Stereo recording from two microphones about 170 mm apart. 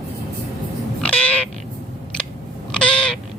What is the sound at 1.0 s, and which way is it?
Cat, 10° left (ahead or behind).